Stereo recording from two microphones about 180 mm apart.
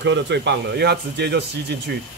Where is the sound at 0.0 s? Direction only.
75° right (ahead or behind).